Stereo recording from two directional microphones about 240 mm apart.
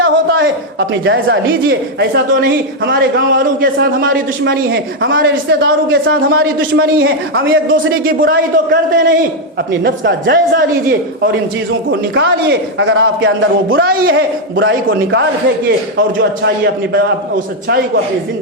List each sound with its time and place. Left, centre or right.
0.0 s a man's voice: right
6.7 s a woman's voice: right
7.7 s a man's voice: right
11.9 s a man's voice: right
13.8 s a man's voice: right
17.7 s a man's voice: right